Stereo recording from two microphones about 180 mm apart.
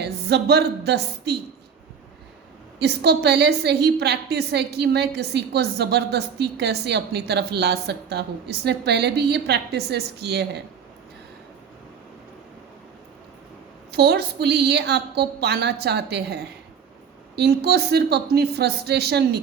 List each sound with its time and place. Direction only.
0.0 s a woman's voice: 65° right (ahead or behind)
2.7 s a woman's voice: 65° right (ahead or behind)
13.9 s a woman's voice: 65° right (ahead or behind)